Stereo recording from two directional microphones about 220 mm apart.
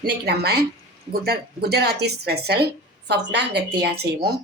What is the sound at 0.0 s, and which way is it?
A woman's voice, 45° right (ahead or behind).